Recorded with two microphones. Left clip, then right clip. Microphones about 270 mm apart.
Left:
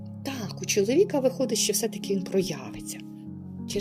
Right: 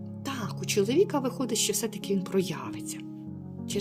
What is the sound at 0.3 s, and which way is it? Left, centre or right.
Music, centre.